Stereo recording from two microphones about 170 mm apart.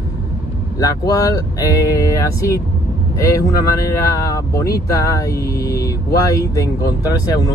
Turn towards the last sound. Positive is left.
turn(degrees=20)  # may be behind; listen again after turning